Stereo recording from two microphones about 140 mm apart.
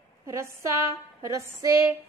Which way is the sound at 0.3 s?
20° right (ahead or behind).